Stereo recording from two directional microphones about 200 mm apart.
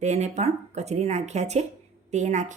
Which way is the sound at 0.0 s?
35° right (ahead or behind).